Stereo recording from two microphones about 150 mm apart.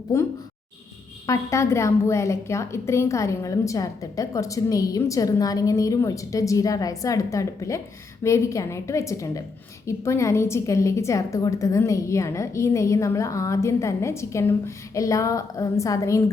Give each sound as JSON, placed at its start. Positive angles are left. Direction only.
{"t": 0.1, "sound": "a woman's voice", "side_deg": 20}
{"t": 1.3, "sound": "a woman's voice", "side_deg": 20}